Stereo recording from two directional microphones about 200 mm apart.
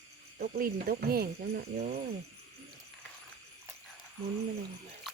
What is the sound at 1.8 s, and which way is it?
Speech, 35° right (ahead or behind).